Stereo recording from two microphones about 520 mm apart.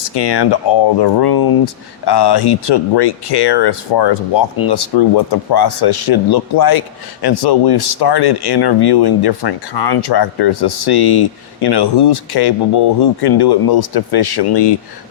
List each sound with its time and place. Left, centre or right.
0.1 s speech: left